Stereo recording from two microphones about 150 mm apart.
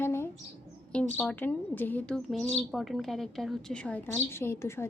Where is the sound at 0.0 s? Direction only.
15° left (ahead or behind).